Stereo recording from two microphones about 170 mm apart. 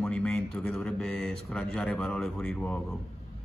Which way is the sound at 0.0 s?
5° left (ahead or behind).